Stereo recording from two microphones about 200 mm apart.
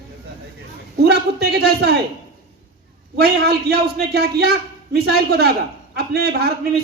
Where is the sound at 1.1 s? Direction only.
55° right (ahead or behind).